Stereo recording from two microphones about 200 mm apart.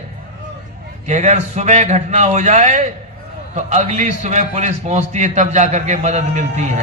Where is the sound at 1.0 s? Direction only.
35° right (ahead or behind).